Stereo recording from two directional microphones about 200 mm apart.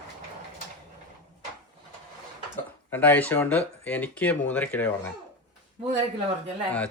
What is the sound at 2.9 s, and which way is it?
Speech, 10° left (ahead or behind).